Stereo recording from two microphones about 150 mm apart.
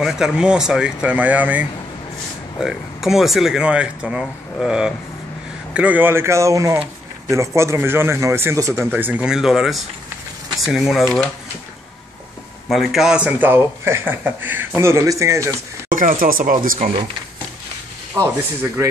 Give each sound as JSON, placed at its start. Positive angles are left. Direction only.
{"t": 0.0, "sound": "a man's voice", "side_deg": -5}
{"t": 12.6, "sound": "a man's voice", "side_deg": 0}
{"t": 15.9, "sound": "speech", "side_deg": -65}
{"t": 18.1, "sound": "speech", "side_deg": -20}